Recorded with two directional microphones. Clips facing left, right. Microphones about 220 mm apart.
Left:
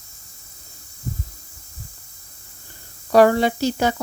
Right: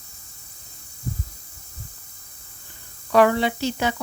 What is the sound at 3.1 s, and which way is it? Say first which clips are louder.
Speech: left 3 dB; 40° left (ahead or behind).